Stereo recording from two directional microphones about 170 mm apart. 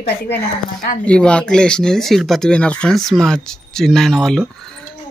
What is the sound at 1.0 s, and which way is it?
Speech, 5° left (ahead or behind).